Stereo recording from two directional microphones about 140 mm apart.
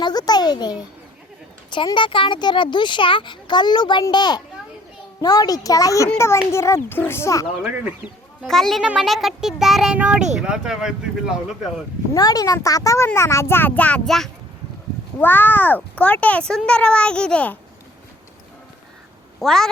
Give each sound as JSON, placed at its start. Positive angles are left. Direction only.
{"t": 0.0, "sound": "a child's voice", "side_deg": 30}
{"t": 7.6, "sound": "speech", "side_deg": -10}
{"t": 8.4, "sound": "a child's voice", "side_deg": 0}
{"t": 12.1, "sound": "a child's voice", "side_deg": 25}
{"t": 19.4, "sound": "a child's voice", "side_deg": 5}